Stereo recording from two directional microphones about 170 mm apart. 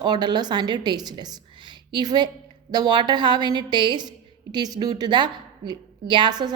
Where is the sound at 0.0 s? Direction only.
25° right (ahead or behind).